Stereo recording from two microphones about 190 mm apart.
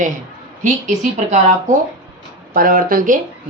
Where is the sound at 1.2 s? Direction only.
40° right (ahead or behind).